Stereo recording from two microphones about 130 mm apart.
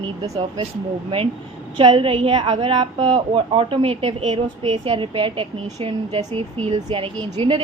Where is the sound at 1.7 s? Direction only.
40° right (ahead or behind).